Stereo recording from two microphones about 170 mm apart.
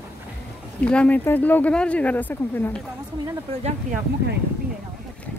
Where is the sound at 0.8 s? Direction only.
5° left (ahead or behind).